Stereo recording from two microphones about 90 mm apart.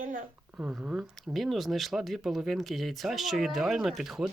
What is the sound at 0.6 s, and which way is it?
Speech, 10° right (ahead or behind).